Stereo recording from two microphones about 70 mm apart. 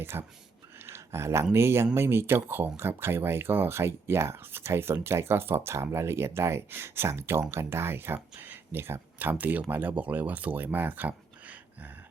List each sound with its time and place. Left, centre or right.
0.0 s speech: right
0.9 s a sound: right
1.5 s speech: right